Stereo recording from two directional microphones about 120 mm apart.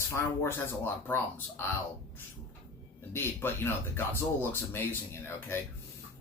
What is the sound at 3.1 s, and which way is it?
Speech, 20° left (ahead or behind).